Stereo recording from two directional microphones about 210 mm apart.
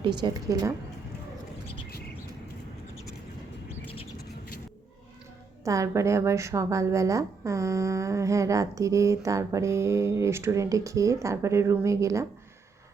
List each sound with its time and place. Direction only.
0.2 s a woman's voice: 20° right (ahead or behind)
5.6 s a woman's voice: 15° right (ahead or behind)